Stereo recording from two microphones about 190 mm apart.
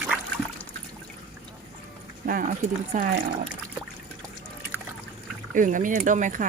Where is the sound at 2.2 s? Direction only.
50° right (ahead or behind).